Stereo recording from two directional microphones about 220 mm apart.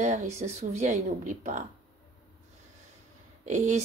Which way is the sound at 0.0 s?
35° right (ahead or behind).